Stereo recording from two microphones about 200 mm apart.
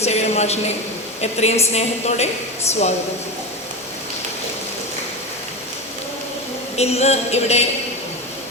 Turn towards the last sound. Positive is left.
turn(degrees=30)  # may be behind; listen again after turning